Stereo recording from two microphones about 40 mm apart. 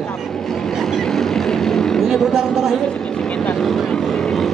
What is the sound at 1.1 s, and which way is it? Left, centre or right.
Vehicle, centre.